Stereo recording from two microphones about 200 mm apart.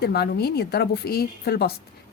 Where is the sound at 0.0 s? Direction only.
55° left (ahead or behind).